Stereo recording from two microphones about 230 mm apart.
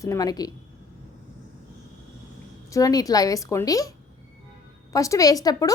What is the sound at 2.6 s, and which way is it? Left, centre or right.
A woman's voice, centre.